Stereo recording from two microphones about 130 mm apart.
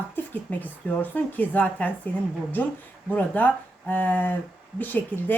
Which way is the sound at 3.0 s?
15° left (ahead or behind).